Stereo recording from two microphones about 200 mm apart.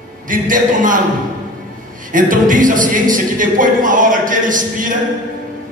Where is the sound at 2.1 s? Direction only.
40° right (ahead or behind).